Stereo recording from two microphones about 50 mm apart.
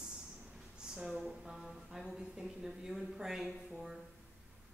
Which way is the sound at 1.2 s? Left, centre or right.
Centre.